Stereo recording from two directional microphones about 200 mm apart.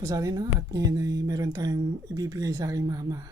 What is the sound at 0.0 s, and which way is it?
Speech, 15° right (ahead or behind).